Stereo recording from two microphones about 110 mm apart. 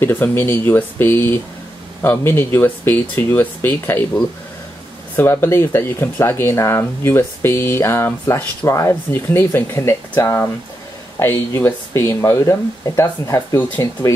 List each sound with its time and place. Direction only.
0.0 s speech: 20° left (ahead or behind)